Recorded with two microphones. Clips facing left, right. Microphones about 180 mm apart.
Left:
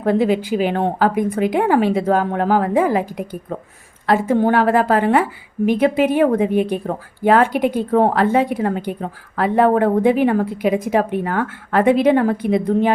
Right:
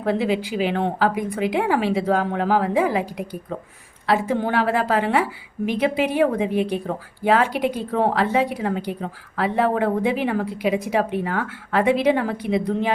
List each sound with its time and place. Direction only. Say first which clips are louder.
0.0 s a woman's voice: left 5 dB; 45° left (ahead or behind)